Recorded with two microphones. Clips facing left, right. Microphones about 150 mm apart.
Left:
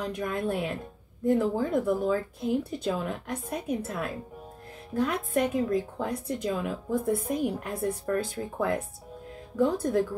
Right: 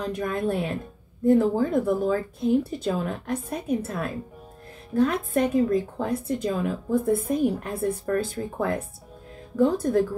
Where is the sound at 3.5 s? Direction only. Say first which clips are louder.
Right 2 dB; centre (ahead or behind).